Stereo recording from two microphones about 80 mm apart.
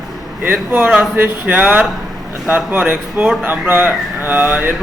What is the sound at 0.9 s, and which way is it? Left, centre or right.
Speech, right.